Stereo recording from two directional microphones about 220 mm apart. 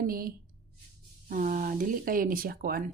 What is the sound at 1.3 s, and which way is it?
Speech, 40° right (ahead or behind).